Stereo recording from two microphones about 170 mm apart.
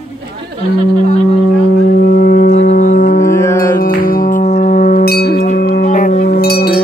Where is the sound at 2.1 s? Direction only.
60° left (ahead or behind).